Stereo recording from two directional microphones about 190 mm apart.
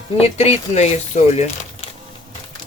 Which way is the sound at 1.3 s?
35° left (ahead or behind).